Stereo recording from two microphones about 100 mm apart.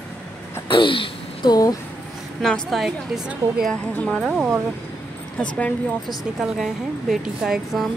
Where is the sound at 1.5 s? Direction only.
35° left (ahead or behind).